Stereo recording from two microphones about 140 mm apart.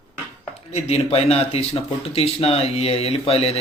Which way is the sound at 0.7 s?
50° left (ahead or behind).